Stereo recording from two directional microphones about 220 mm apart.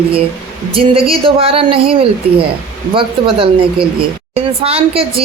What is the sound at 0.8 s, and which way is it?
A woman's voice, 25° right (ahead or behind).